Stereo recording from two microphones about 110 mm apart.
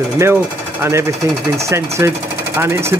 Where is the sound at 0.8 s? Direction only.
25° right (ahead or behind).